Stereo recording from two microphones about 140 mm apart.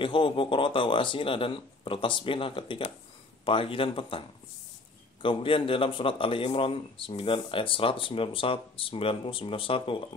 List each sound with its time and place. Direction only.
0.0 s speech: 35° left (ahead or behind)
5.2 s speech: 40° left (ahead or behind)